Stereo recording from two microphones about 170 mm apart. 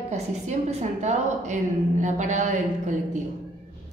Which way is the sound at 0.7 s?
45° right (ahead or behind).